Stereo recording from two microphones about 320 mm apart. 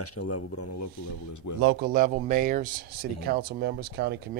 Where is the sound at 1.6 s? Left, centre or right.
Right.